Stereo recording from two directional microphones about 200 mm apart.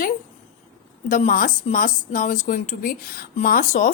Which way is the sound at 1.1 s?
40° left (ahead or behind).